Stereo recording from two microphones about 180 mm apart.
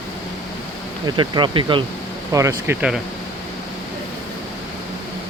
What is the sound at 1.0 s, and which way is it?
Speech, 25° right (ahead or behind).